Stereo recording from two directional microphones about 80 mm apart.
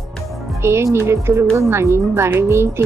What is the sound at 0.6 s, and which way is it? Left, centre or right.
Speech, right.